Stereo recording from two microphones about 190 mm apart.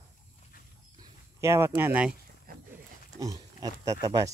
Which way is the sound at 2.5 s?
50° right (ahead or behind).